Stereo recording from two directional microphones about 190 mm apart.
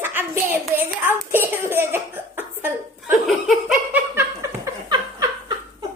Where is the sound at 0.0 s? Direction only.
10° right (ahead or behind).